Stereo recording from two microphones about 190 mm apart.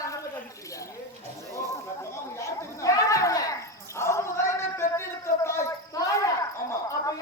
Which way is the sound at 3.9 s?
15° left (ahead or behind).